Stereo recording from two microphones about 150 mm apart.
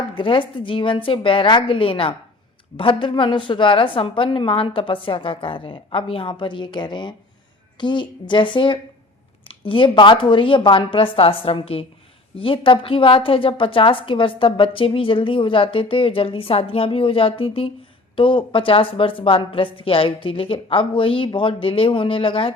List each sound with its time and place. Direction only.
0.1 s a woman's voice: 35° left (ahead or behind)